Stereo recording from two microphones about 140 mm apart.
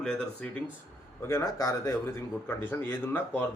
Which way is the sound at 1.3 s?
20° left (ahead or behind).